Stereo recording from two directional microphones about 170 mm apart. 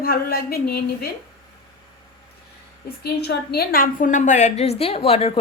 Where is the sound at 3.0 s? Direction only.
70° left (ahead or behind).